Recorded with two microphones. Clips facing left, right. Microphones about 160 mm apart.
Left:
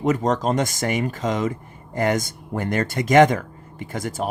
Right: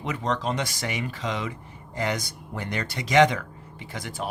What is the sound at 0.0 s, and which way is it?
Speech, 45° left (ahead or behind).